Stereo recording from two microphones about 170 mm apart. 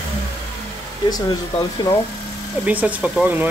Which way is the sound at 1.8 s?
25° left (ahead or behind).